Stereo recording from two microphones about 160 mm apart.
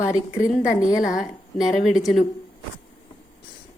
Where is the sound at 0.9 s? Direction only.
55° left (ahead or behind).